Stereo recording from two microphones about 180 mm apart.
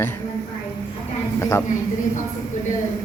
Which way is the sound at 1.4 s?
15° left (ahead or behind).